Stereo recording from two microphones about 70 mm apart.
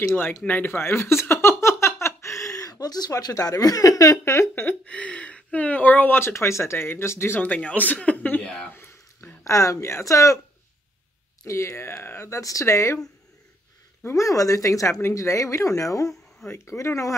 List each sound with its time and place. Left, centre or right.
0.5 s speech: left
1.6 s a sound: left
3.3 s speech: left
4.2 s speech: left
4.8 s speech: centre; by 7.4 s left
7.4 s speech: left
9.4 s speech: left
11.4 s speech: left
12.3 s speech: left
14.0 s speech: left